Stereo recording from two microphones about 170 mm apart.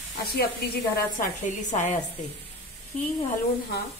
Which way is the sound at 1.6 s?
45° left (ahead or behind).